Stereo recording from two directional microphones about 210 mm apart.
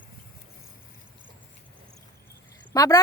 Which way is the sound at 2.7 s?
15° left (ahead or behind).